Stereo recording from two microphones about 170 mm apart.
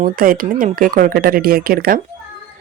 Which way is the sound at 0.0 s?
55° right (ahead or behind).